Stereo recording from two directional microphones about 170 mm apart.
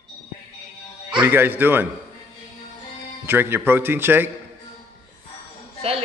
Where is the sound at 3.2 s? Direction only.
15° right (ahead or behind).